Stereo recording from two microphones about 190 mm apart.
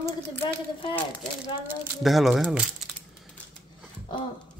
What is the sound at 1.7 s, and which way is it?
Speech, centre (ahead or behind).